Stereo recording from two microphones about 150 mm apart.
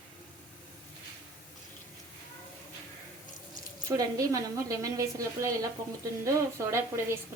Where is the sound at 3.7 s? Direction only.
25° right (ahead or behind).